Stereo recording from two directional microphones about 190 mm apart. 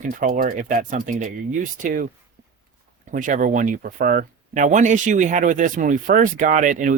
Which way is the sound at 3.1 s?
45° right (ahead or behind).